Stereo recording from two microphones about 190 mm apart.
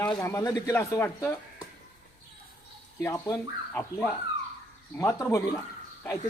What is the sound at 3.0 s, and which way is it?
Speech, 15° left (ahead or behind).